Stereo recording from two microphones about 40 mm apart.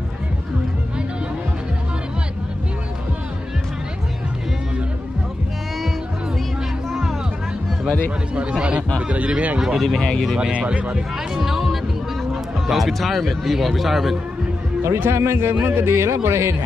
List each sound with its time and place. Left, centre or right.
8.4 s speech: right
9.6 s speech: centre
11.3 s music: centre
12.6 s speech: centre
14.8 s speech: right